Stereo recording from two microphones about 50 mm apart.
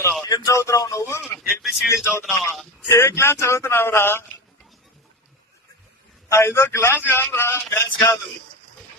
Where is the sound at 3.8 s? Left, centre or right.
Left.